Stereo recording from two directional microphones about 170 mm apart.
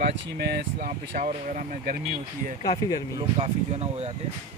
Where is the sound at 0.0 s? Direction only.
70° right (ahead or behind); by 2.0 s 50° right (ahead or behind).